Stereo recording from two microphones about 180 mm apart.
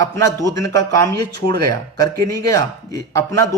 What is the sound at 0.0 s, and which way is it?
A man's voice, 15° left (ahead or behind).